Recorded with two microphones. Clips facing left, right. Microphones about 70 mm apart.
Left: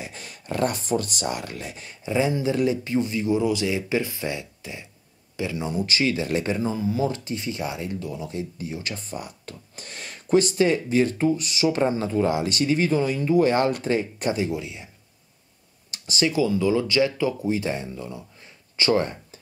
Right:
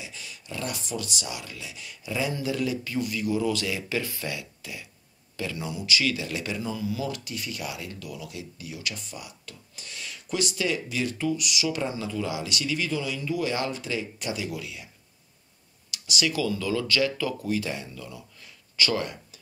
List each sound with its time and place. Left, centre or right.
0.0 s speech: left
5.7 s speech: left
15.9 s speech: left